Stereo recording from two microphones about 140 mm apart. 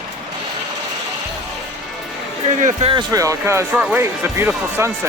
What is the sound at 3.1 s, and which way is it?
Speech, 25° right (ahead or behind).